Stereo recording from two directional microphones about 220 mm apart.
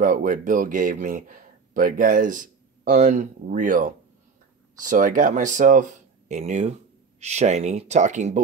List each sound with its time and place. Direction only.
0.0 s speech: 35° right (ahead or behind)